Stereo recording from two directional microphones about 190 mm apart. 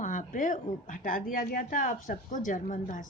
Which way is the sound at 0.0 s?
40° left (ahead or behind).